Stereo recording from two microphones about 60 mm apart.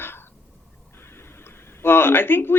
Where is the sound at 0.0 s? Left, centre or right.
Left.